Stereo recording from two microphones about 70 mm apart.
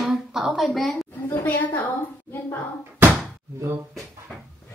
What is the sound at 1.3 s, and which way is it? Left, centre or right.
Speech, left.